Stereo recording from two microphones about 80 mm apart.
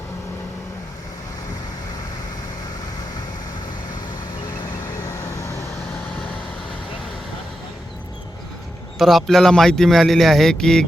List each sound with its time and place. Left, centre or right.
4.9 s vehicle: left
9.0 s a man's voice: centre